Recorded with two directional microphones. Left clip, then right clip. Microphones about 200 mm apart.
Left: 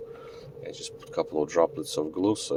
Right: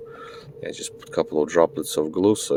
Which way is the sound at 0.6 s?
35° right (ahead or behind).